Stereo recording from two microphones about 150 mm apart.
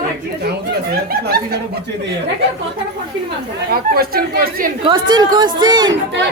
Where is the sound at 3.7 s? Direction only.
90° right.